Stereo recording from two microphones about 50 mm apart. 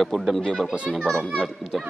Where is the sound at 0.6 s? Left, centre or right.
Right.